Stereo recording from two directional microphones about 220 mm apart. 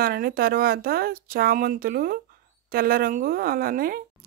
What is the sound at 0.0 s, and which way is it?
Speech, 40° right (ahead or behind).